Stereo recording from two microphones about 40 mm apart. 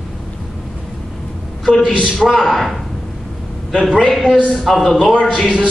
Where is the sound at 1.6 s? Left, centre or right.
Centre.